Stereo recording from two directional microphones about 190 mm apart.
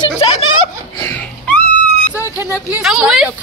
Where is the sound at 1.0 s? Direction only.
5° left (ahead or behind).